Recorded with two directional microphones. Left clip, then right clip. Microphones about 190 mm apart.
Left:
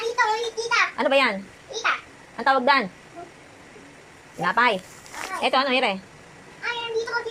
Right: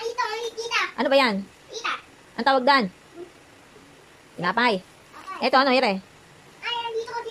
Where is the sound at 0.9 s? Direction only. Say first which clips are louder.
Even; 25° right (ahead or behind).